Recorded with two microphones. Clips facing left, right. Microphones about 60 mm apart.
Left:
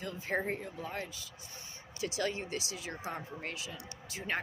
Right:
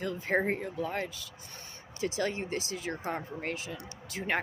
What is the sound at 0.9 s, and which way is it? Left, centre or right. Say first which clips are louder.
Speech: right 5 dB; right.